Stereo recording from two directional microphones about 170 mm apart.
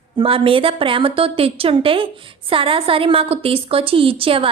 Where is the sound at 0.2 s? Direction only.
30° right (ahead or behind).